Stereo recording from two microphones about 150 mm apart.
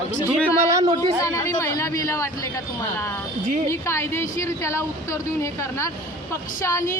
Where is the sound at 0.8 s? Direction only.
30° right (ahead or behind).